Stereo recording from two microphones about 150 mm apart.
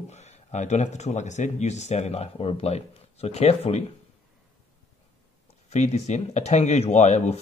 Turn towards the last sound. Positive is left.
turn(degrees=45)  # may be behind; listen again after turning